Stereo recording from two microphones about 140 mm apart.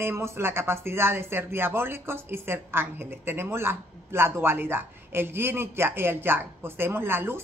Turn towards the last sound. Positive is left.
turn(degrees=-15)  # may be behind; listen again after turning